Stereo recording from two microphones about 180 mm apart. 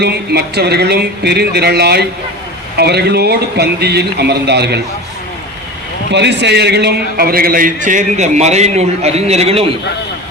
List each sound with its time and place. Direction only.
0.0 s speech: 65° right (ahead or behind)
6.1 s a man's voice: 75° right (ahead or behind); by 9.7 s 35° right (ahead or behind)